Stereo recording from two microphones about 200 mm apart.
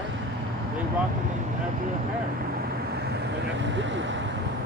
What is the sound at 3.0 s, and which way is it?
Vehicle, 60° right (ahead or behind).